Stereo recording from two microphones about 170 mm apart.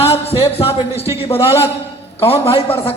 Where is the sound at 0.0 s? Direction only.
35° left (ahead or behind).